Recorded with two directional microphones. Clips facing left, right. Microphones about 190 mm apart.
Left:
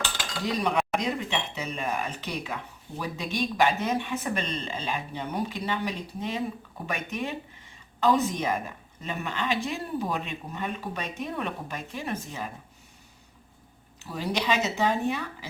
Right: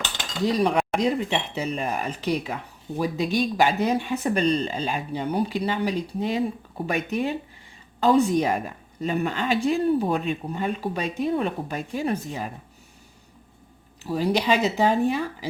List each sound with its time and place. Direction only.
0.4 s speech: 35° right (ahead or behind)
14.0 s speech: 35° right (ahead or behind)